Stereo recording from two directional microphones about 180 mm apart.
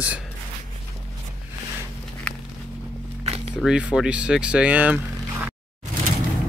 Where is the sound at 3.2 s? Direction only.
35° right (ahead or behind).